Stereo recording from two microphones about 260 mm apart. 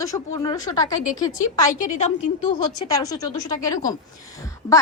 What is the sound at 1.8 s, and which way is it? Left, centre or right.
Speech, left.